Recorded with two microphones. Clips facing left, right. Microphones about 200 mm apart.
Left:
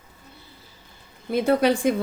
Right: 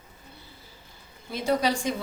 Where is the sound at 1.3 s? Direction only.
55° left (ahead or behind).